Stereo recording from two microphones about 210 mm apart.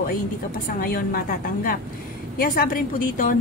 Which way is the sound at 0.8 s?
45° left (ahead or behind).